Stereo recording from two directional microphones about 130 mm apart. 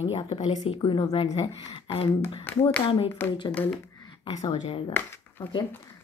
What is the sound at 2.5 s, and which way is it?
Speech, 15° left (ahead or behind).